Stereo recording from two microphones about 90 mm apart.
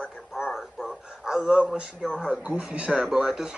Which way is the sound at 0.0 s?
5° right (ahead or behind).